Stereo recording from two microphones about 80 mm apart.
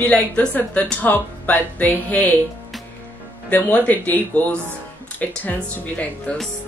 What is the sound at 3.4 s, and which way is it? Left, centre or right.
Speech, centre.